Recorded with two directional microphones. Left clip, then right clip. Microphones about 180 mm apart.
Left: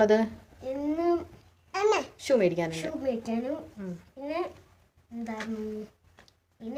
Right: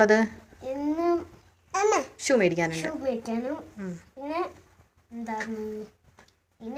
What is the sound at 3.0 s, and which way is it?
Speech, 25° left (ahead or behind).